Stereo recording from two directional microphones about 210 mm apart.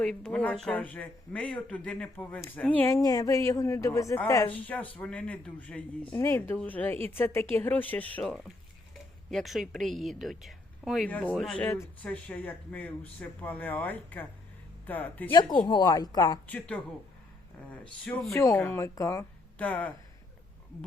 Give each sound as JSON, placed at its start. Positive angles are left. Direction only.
{"t": 0.0, "sound": "a woman's voice", "side_deg": 5}
{"t": 15.3, "sound": "speech", "side_deg": 20}
{"t": 16.5, "sound": "a woman's voice", "side_deg": 5}
{"t": 18.0, "sound": "a woman's voice", "side_deg": 5}